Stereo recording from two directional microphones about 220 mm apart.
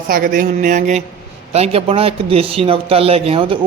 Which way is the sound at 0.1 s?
40° right (ahead or behind).